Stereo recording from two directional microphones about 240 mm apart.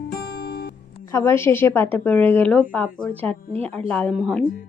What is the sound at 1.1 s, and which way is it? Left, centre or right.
A woman's voice, centre.